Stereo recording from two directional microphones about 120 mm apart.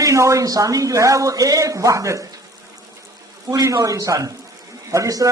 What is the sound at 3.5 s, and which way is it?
A man's voice, 25° right (ahead or behind).